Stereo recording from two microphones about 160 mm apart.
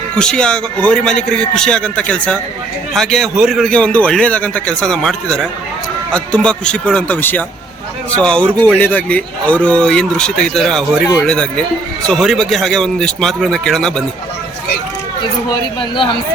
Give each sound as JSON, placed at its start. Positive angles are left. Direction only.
{"t": 0.2, "sound": "a man's voice", "side_deg": 5}